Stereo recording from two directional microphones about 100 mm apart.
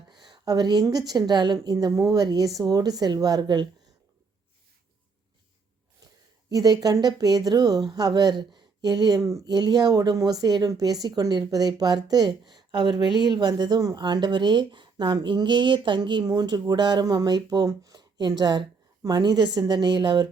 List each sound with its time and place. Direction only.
0.1 s speech: 45° right (ahead or behind)
6.5 s a woman's voice: 40° right (ahead or behind)